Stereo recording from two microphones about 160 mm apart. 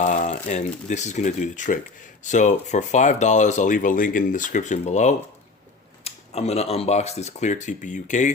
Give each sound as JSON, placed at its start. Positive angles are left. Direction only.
{"t": 0.0, "sound": "speech", "side_deg": 50}